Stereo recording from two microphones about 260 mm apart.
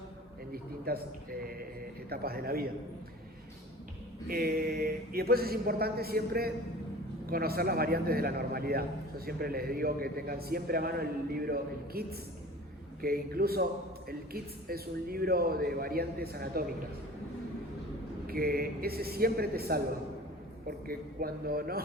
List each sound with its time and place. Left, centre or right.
0.5 s a man's voice: right
4.3 s a man's voice: right
18.3 s a man's voice: right